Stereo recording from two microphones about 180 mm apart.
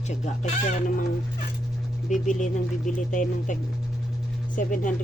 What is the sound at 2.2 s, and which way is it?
Speech, 45° left (ahead or behind).